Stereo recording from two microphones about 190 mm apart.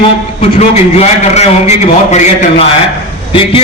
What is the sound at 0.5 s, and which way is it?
A man's voice, 35° left (ahead or behind).